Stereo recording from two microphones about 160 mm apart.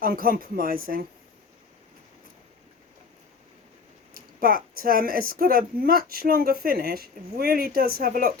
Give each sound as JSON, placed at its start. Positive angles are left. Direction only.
{"t": 0.0, "sound": "speech", "side_deg": -65}
{"t": 4.1, "sound": "speech", "side_deg": -65}